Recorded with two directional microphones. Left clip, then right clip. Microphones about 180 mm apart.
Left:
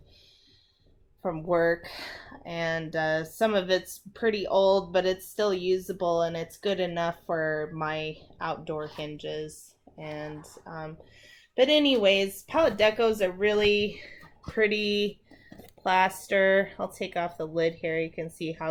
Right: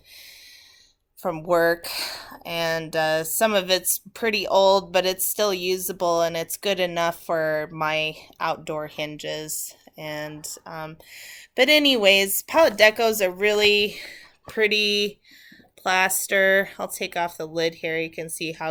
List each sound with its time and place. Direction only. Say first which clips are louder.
1.2 s speech: right 5 dB; 20° right (ahead or behind); by 18.7 s centre (ahead or behind)